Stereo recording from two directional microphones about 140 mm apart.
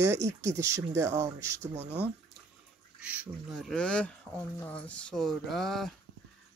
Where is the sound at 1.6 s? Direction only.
50° right (ahead or behind).